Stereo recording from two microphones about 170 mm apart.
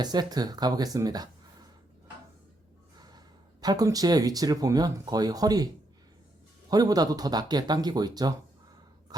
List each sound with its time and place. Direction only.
0.0 s speech: 25° right (ahead or behind)
3.0 s speech: 25° right (ahead or behind)
6.7 s speech: 20° right (ahead or behind)